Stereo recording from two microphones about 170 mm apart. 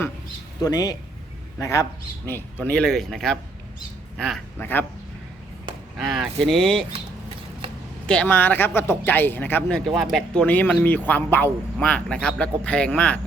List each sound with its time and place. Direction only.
0.6 s speech: 20° left (ahead or behind)
2.6 s speech: 5° left (ahead or behind)
4.6 s speech: 10° left (ahead or behind)
6.0 s speech: centre (ahead or behind)
8.0 s speech: 5° left (ahead or behind)